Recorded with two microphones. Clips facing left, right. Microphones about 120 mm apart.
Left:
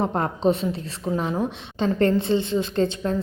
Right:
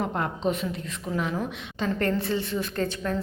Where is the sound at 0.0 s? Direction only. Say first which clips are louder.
Left 5 dB; 35° left (ahead or behind).